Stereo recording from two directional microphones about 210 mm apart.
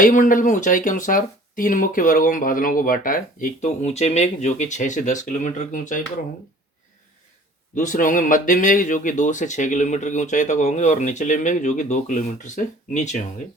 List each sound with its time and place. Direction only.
0.0 s speech: 40° left (ahead or behind)
7.8 s speech: 40° left (ahead or behind)